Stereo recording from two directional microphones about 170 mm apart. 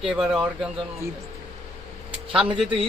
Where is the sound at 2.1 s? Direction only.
5° right (ahead or behind).